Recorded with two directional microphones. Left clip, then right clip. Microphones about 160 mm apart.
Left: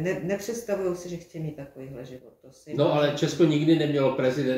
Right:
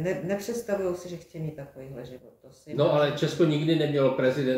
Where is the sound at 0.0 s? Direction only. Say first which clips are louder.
Left 1 dB; 20° right (ahead or behind).